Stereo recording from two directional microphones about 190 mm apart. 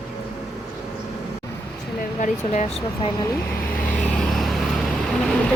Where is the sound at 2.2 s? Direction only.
40° left (ahead or behind).